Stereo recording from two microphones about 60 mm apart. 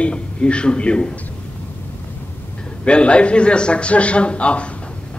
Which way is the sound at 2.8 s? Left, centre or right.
Centre.